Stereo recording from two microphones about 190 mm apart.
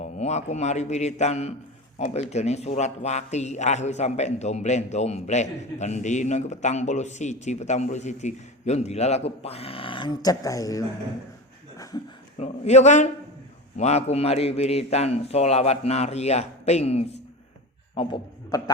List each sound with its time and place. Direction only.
0.0 s a man's voice: 35° left (ahead or behind); by 10.8 s 20° left (ahead or behind)
12.4 s a man's voice: 35° left (ahead or behind)
17.9 s a sound: 25° left (ahead or behind)